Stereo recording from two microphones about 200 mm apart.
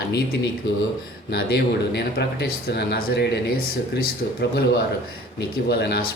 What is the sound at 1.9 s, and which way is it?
Speech, 55° left (ahead or behind).